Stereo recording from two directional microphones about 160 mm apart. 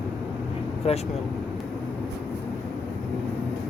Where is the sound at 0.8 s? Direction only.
40° left (ahead or behind).